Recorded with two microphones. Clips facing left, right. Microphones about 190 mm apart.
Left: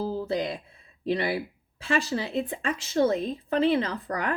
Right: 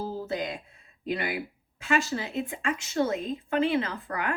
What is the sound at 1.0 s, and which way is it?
A woman's voice, 35° left (ahead or behind).